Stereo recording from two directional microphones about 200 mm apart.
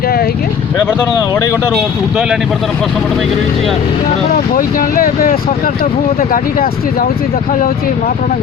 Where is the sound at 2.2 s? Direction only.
Centre (ahead or behind).